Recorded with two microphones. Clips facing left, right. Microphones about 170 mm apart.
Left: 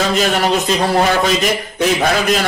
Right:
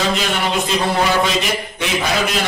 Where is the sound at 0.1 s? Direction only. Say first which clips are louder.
Left 5 dB; 40° left (ahead or behind).